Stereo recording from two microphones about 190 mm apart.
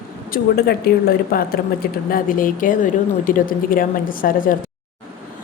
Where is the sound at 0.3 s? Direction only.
50° left (ahead or behind).